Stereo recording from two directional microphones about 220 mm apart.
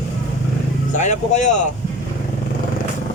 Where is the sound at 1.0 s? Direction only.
30° left (ahead or behind).